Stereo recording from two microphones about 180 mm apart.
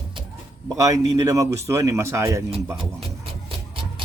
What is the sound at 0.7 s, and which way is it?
Speech, 20° right (ahead or behind).